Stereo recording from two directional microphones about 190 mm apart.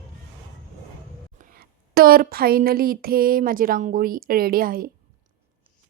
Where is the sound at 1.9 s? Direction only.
50° right (ahead or behind).